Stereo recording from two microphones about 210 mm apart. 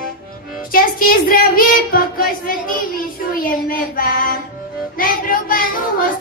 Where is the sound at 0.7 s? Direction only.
45° left (ahead or behind).